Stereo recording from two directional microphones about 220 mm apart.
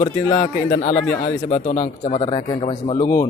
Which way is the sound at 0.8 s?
30° left (ahead or behind).